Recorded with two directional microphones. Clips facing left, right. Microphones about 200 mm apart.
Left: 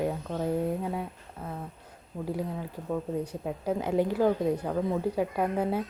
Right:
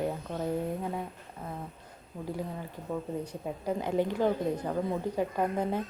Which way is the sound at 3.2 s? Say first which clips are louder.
Left 2 dB; 10° left (ahead or behind).